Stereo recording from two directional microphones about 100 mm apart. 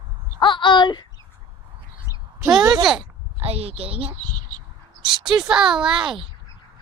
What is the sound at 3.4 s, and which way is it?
Speech, 80° right.